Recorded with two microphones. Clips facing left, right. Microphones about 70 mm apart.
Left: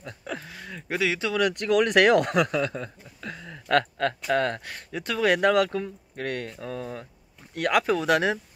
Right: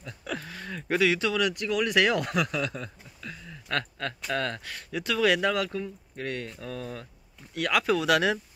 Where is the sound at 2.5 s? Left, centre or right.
Left.